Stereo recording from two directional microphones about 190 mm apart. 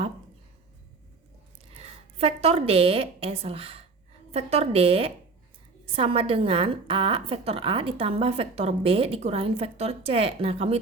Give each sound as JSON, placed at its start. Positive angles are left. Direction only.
{"t": 1.7, "sound": "a woman's voice", "side_deg": -35}